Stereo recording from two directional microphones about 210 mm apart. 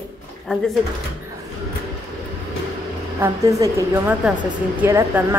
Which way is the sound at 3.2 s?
15° right (ahead or behind).